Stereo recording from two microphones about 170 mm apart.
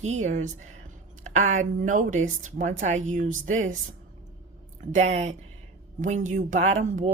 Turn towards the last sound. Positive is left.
turn(degrees=-45)  # may be behind; listen again after turning